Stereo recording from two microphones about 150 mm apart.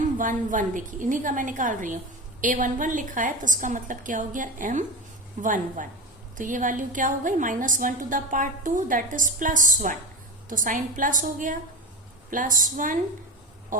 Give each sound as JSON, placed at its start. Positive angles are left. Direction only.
{"t": 0.2, "sound": "a woman's voice", "side_deg": -60}